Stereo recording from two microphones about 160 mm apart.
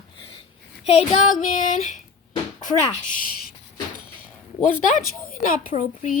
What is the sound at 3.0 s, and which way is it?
Speech, 60° left (ahead or behind).